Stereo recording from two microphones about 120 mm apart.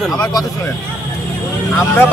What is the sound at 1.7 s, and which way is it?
Speech, 20° left (ahead or behind).